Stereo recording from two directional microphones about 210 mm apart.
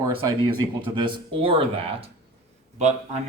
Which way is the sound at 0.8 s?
20° right (ahead or behind).